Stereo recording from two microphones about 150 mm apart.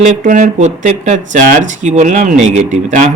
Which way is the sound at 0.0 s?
55° right (ahead or behind).